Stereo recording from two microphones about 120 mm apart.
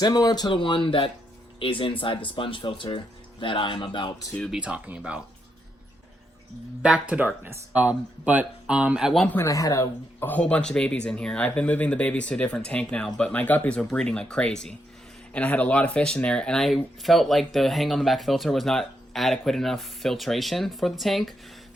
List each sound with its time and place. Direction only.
0.0 s speech: 35° left (ahead or behind)
4.4 s speech: centre (ahead or behind)
4.6 s speech: 10° right (ahead or behind)
7.1 s speech: 15° right (ahead or behind)
9.2 s speech: 15° left (ahead or behind)
9.5 s speech: 25° left (ahead or behind); by 21.3 s centre (ahead or behind)